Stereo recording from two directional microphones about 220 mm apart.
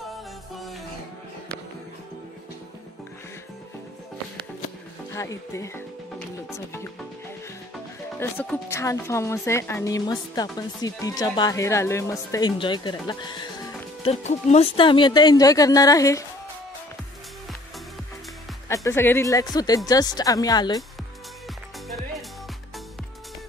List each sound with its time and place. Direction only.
5.1 s speech: 15° left (ahead or behind)
8.2 s speech: 10° left (ahead or behind)
18.7 s speech: 10° left (ahead or behind)
21.8 s music: centre (ahead or behind)